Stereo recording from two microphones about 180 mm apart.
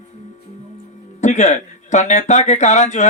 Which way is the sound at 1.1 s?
40° left (ahead or behind).